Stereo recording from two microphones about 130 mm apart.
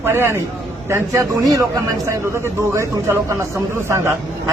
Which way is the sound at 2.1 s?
20° right (ahead or behind).